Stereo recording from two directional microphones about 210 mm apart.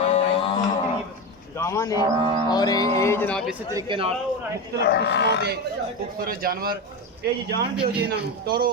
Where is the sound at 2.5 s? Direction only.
20° left (ahead or behind).